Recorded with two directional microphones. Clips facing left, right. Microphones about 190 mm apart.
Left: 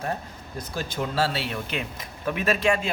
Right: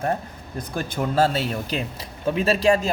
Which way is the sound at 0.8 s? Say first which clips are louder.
Right 5 dB; 45° right (ahead or behind).